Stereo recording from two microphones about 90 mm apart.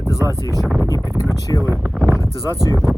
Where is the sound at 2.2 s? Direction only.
35° left (ahead or behind).